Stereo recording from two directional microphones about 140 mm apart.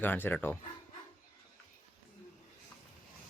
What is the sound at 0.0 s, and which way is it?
Speech, 15° left (ahead or behind).